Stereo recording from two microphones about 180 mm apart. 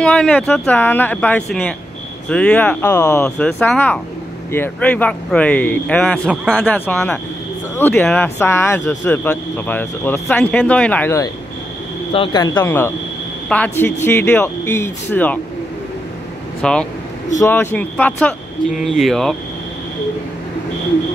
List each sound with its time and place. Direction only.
0.0 s speech: 5° left (ahead or behind)
12.1 s speech: 25° left (ahead or behind); by 15.3 s 10° left (ahead or behind)
16.6 s speech: 5° left (ahead or behind)